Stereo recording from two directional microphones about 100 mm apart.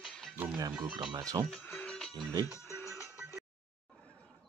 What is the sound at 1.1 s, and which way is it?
Speech, 40° right (ahead or behind).